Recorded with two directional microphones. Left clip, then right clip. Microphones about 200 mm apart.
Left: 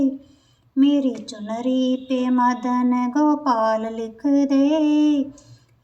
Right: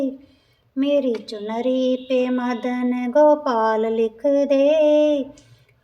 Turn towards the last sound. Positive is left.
turn(degrees=-35)  # may be behind; listen again after turning